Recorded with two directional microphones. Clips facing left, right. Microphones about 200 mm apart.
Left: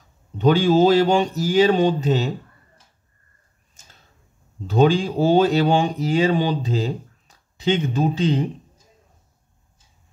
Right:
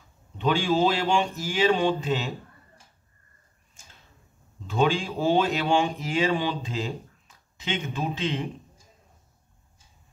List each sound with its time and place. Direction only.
0.4 s speech: 40° left (ahead or behind)
4.6 s speech: 35° left (ahead or behind)